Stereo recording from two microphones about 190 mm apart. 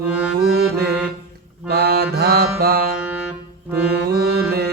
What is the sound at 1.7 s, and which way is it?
Mantra, 55° right (ahead or behind).